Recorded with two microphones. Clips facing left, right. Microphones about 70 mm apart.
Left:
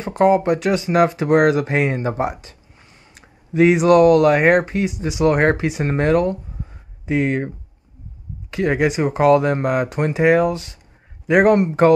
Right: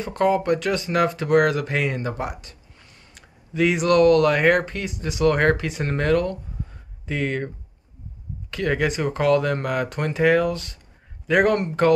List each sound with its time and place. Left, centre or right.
0.0 s speech: left